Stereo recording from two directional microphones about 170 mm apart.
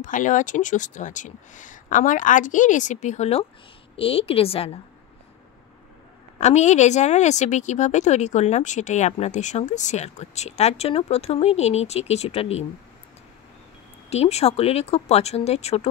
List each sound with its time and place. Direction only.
0.0 s speech: 50° left (ahead or behind)
6.3 s speech: 40° left (ahead or behind)
14.1 s speech: 40° left (ahead or behind)